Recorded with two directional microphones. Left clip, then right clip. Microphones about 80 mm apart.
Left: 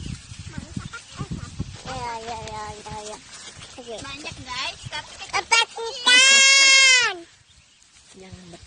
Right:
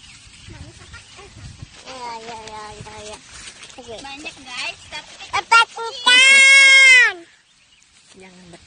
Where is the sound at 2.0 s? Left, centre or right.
Left.